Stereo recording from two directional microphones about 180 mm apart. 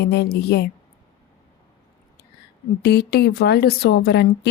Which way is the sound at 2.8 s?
65° left (ahead or behind).